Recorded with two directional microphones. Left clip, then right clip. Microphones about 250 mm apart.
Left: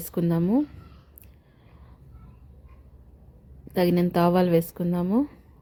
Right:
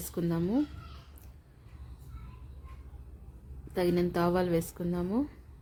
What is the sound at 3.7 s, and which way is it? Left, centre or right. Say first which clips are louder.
A woman's voice: left 6 dB; centre.